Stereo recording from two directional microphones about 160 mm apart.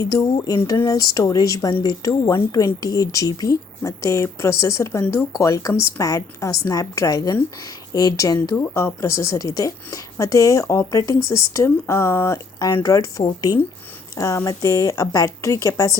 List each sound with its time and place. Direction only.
0.0 s speech: 20° left (ahead or behind)